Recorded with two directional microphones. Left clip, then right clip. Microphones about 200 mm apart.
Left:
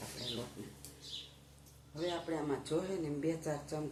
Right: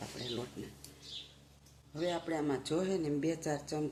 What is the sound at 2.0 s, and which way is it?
Speech, 55° right (ahead or behind).